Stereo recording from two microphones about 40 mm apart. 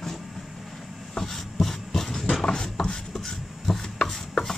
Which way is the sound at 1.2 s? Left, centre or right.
Centre.